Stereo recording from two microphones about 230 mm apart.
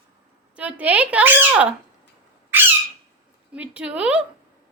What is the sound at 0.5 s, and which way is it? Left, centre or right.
Speech, centre.